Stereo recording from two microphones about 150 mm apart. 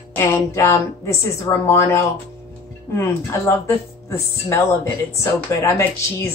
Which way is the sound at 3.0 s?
20° left (ahead or behind).